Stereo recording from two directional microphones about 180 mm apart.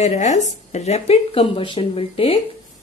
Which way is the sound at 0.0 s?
40° left (ahead or behind).